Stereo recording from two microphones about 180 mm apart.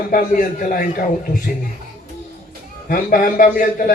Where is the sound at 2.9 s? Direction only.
50° left (ahead or behind).